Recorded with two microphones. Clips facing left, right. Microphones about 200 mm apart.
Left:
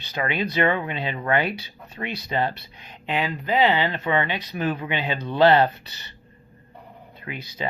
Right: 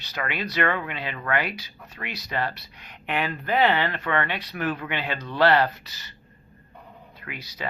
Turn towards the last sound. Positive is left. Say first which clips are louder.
# left 4 dB
turn(degrees=25)  # may be behind; listen again after turning